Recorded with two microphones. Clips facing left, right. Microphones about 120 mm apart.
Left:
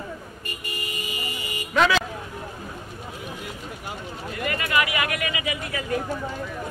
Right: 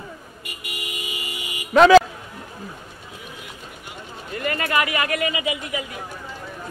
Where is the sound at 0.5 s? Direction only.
15° right (ahead or behind).